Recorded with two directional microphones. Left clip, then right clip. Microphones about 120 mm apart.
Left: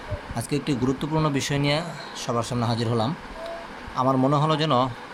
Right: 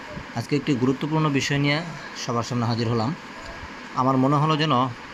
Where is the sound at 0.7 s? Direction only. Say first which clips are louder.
Right 1 dB; 15° right (ahead or behind).